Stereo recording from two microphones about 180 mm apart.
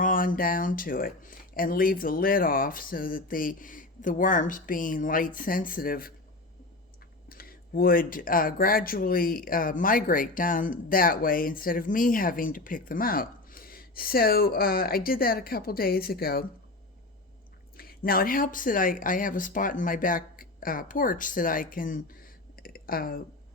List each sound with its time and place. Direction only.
0.0 s speech: 50° left (ahead or behind)
7.3 s speech: 55° left (ahead or behind)
17.7 s speech: 55° left (ahead or behind)
22.6 s a sound: 55° left (ahead or behind)